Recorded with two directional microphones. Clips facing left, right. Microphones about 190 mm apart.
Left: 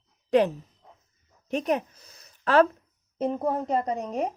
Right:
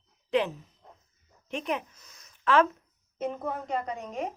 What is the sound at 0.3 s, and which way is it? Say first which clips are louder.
A woman's voice: left 6 dB; 40° left (ahead or behind).